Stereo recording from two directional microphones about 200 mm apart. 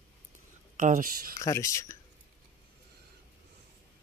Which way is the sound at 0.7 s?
40° right (ahead or behind).